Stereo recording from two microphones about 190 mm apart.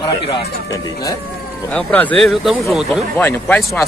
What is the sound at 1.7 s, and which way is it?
A man's voice, 5° left (ahead or behind).